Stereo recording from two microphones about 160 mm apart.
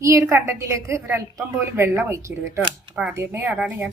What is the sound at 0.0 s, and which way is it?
A woman's voice, 20° right (ahead or behind).